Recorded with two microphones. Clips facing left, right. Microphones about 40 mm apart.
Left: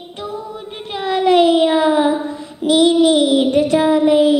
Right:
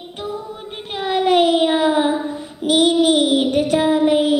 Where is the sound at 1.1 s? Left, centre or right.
Centre.